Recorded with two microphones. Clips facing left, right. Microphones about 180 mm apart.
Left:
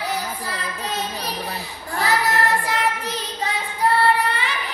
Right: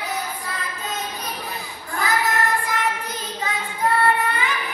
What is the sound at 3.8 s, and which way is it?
Music, 35° left (ahead or behind).